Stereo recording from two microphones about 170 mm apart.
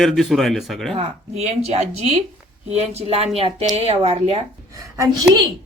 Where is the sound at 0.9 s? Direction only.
40° right (ahead or behind).